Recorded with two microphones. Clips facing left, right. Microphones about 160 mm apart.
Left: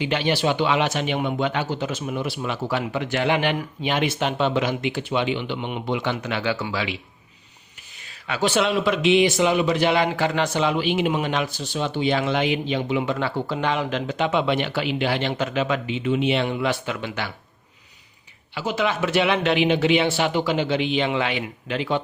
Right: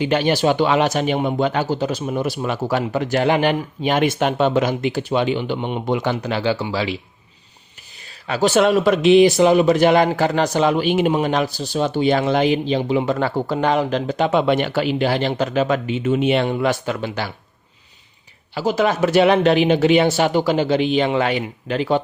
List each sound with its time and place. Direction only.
0.0 s speech: 45° right (ahead or behind)
18.5 s speech: 40° right (ahead or behind)